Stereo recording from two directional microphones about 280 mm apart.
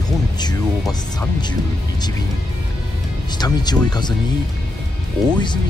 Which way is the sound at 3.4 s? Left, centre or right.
Centre.